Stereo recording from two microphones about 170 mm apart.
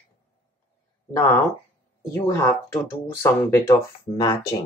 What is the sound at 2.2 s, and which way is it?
Speech, 15° left (ahead or behind).